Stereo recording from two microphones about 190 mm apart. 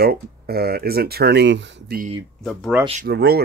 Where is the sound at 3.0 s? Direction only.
60° right (ahead or behind).